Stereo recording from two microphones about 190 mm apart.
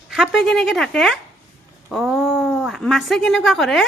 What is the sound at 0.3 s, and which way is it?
A woman's voice, centre (ahead or behind).